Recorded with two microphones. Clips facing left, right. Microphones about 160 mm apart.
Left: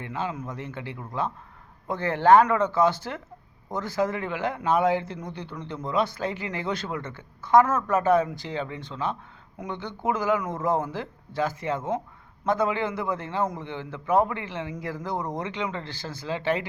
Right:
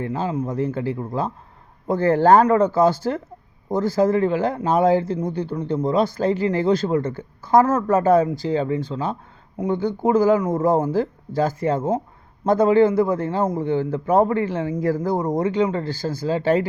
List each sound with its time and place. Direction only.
0.0 s speech: 35° right (ahead or behind)